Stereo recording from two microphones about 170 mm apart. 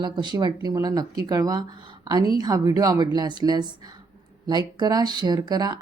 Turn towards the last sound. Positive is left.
turn(degrees=-25)  # may be behind; listen again after turning